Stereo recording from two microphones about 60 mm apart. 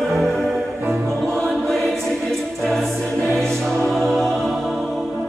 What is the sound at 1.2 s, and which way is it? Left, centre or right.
Music, centre.